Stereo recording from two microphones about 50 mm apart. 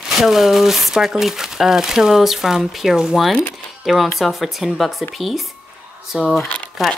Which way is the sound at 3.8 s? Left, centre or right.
Centre.